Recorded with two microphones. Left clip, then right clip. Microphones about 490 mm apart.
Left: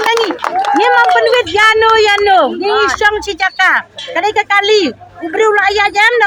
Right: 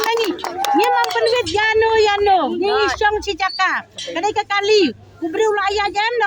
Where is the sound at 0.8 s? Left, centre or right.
Right.